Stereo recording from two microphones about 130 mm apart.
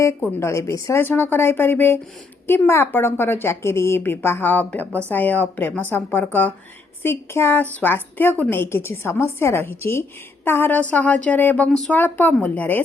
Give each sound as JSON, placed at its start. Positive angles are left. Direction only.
{"t": 0.3, "sound": "a woman's voice", "side_deg": 20}